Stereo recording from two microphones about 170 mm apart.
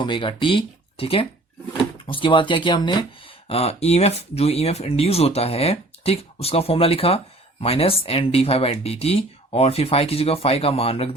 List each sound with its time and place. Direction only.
0.0 s speech: 30° left (ahead or behind)